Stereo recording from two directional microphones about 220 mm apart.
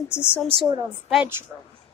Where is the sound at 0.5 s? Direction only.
20° right (ahead or behind).